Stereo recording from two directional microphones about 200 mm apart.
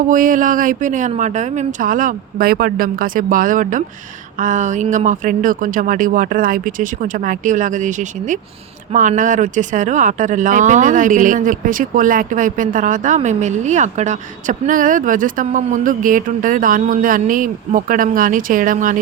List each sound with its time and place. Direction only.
0.1 s speech: 40° right (ahead or behind)